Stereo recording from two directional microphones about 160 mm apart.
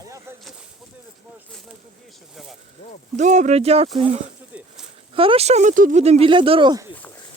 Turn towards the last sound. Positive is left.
turn(degrees=-25)  # may be behind; listen again after turning